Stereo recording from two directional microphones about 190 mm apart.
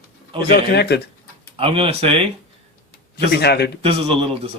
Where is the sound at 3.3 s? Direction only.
60° left (ahead or behind).